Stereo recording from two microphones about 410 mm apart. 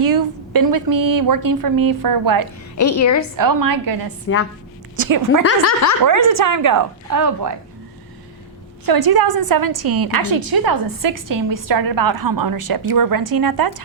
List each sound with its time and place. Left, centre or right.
0.5 s a woman's voice: right
2.7 s speech: left
3.3 s a woman's voice: right
4.3 s a woman's voice: left
5.4 s speech: left
6.1 s a woman's voice: right
8.9 s a woman's voice: right